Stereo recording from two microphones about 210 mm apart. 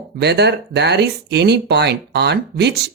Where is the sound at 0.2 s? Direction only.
50° right (ahead or behind).